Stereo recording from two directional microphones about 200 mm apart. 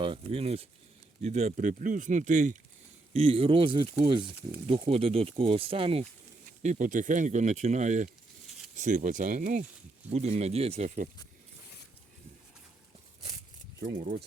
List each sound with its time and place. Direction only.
0.0 s speech: 25° right (ahead or behind)